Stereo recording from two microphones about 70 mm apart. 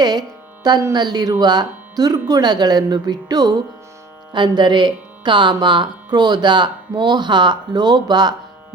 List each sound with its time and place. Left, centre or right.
0.0 s speech: right
4.3 s speech: right